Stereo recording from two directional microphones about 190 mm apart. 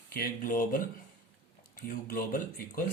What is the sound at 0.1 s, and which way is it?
Speech, 50° left (ahead or behind).